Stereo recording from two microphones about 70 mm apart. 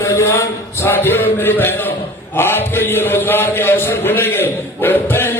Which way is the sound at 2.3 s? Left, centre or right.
Left.